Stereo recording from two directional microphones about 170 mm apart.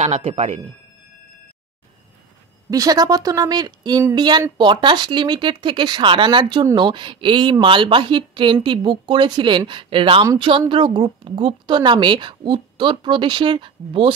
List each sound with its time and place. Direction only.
0.0 s speech: 40° right (ahead or behind)
2.7 s speech: 20° right (ahead or behind)